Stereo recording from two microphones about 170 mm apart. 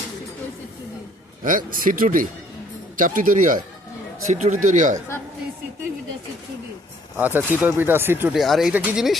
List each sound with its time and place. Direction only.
1.5 s speech: 55° right (ahead or behind)
7.2 s speech: 10° right (ahead or behind)
8.3 s speech: centre (ahead or behind)